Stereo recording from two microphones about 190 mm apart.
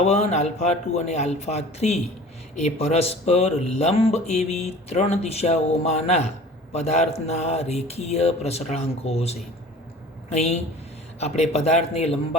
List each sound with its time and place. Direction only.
0.0 s speech: 35° left (ahead or behind)